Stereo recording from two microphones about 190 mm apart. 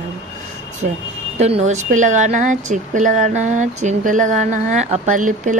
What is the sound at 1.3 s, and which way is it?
Speech, 35° right (ahead or behind).